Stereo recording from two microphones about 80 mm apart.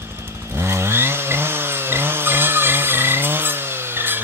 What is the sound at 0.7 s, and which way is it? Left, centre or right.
Chainsaw, right.